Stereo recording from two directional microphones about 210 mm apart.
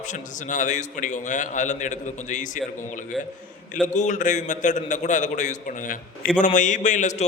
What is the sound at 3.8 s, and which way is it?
A man's voice, 35° left (ahead or behind).